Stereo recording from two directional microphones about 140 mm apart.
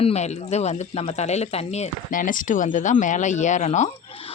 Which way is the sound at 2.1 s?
70° left (ahead or behind).